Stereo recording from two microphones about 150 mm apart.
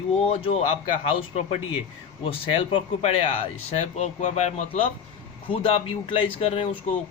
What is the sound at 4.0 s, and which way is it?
Speech, 50° left (ahead or behind).